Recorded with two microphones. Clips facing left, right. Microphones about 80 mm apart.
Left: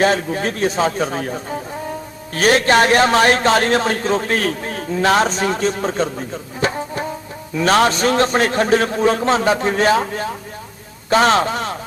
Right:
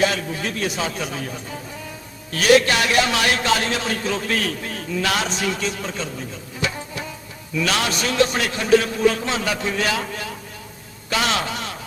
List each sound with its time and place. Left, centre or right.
0.0 s a man's voice: left